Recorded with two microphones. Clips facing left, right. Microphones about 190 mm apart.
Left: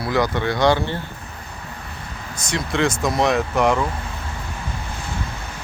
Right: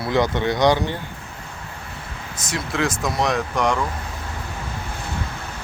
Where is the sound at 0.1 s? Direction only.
20° right (ahead or behind).